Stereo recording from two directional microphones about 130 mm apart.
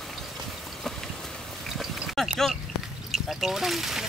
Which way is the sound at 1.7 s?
Centre (ahead or behind).